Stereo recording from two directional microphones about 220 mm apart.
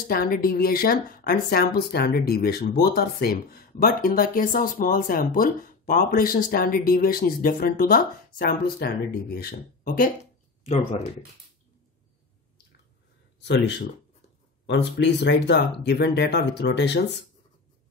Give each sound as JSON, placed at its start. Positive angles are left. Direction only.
{"t": 0.1, "sound": "speech", "side_deg": 40}
{"t": 10.6, "sound": "speech", "side_deg": 30}
{"t": 13.4, "sound": "speech", "side_deg": 50}